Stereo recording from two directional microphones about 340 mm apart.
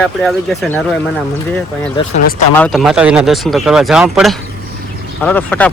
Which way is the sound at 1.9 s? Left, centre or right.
Left.